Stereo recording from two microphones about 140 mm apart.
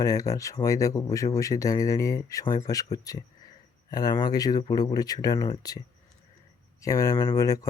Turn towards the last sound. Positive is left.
turn(degrees=25)  # may be behind; listen again after turning